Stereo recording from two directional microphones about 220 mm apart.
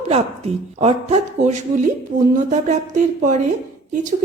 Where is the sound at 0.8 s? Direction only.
30° right (ahead or behind).